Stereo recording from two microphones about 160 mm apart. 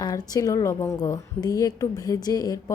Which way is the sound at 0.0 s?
25° left (ahead or behind).